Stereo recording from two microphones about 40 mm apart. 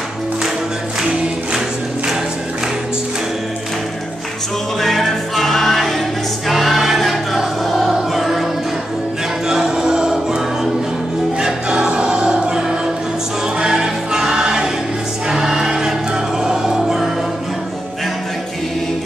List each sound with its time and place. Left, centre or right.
4.7 s music: centre
9.5 s music: centre
15.2 s choir: centre
16.4 s music: centre